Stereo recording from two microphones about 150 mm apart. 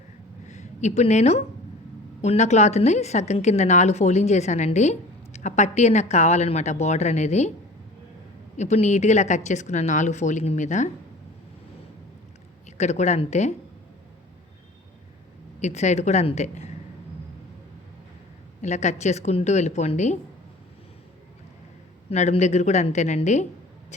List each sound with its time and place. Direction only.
0.4 s a woman's voice: 50° left (ahead or behind)
8.5 s a woman's voice: 50° left (ahead or behind)
12.7 s a woman's voice: 50° left (ahead or behind)
15.6 s a woman's voice: 50° left (ahead or behind)
18.6 s a woman's voice: 50° left (ahead or behind)
22.1 s a woman's voice: 50° left (ahead or behind)